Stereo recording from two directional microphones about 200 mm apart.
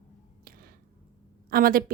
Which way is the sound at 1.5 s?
45° right (ahead or behind).